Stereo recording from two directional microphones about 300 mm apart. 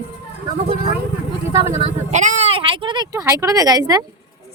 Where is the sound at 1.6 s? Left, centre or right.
Right.